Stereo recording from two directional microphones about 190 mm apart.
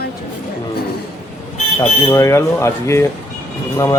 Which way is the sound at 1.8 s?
15° left (ahead or behind).